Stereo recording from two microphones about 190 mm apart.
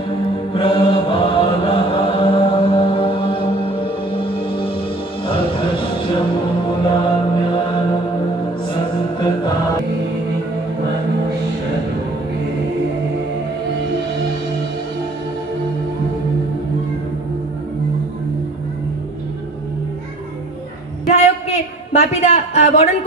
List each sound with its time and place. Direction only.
0.6 s chant: 30° left (ahead or behind)
5.2 s music: 25° left (ahead or behind)
6.9 s mantra: 25° left (ahead or behind)
8.9 s music: 25° left (ahead or behind)
21.1 s a sound: 35° left (ahead or behind)